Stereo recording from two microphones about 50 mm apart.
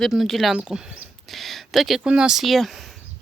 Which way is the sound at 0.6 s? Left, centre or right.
Centre.